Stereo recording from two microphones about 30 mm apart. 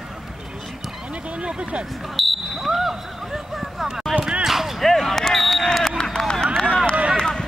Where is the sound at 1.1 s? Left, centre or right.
Right.